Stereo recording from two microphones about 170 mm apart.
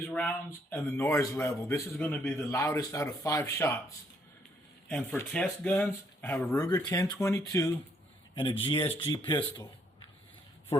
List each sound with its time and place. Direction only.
0.0 s speech: 5° left (ahead or behind)
8.4 s speech: 30° left (ahead or behind)